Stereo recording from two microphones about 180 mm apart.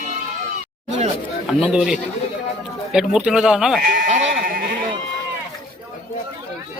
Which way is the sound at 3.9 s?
50° right (ahead or behind).